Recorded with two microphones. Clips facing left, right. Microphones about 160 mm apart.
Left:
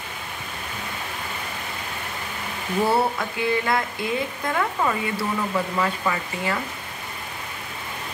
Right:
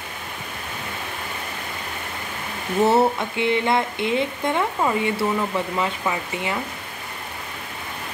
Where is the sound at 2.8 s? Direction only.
25° right (ahead or behind).